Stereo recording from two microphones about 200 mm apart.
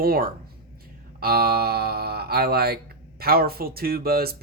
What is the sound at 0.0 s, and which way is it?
Speech, 45° right (ahead or behind).